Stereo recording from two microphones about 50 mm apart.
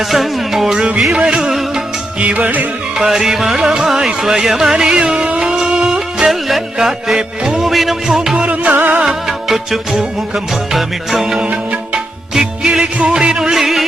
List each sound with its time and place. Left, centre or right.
0.0 s music: centre
1.1 s music: centre
2.2 s music: right
3.0 s music: centre
7.7 s music: centre
8.4 s music: right
8.7 s music: right
9.0 s music: centre
11.4 s music: right
12.3 s music: centre
13.4 s music: centre